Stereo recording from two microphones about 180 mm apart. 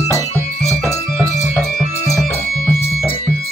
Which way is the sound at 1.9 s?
40° left (ahead or behind).